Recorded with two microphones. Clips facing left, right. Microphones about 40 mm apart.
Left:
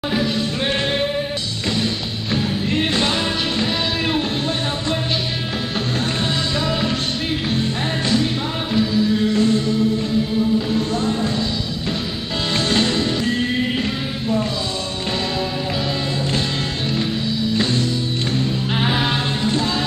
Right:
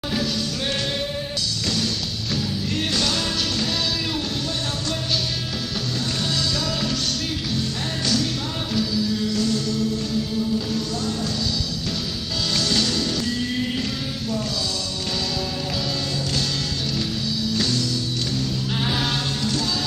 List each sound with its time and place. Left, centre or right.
2.3 s music: left
7.5 s music: left
12.5 s music: left
16.9 s music: left